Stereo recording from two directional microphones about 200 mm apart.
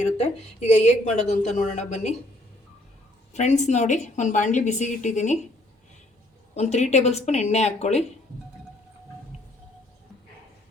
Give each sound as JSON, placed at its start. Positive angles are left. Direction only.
{"t": 0.0, "sound": "a woman's voice", "side_deg": 35}
{"t": 3.3, "sound": "a woman's voice", "side_deg": 35}
{"t": 6.5, "sound": "a woman's voice", "side_deg": 35}